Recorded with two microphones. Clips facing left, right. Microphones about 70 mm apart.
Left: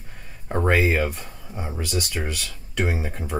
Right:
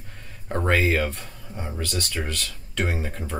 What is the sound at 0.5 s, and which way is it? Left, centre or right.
Speech, centre.